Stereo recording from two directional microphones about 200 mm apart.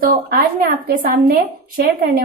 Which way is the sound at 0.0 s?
45° right (ahead or behind).